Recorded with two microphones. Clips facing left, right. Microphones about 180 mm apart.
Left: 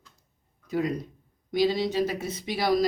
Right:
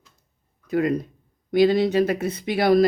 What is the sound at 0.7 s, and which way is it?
Speech, 60° right (ahead or behind).